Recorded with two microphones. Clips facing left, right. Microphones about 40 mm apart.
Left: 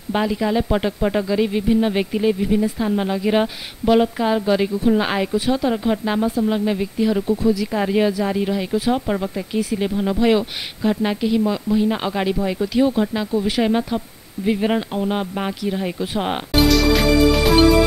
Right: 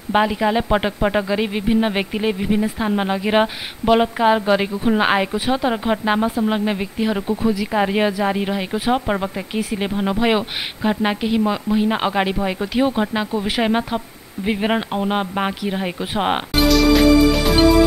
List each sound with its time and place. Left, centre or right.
0.1 s speech: right
16.5 s music: centre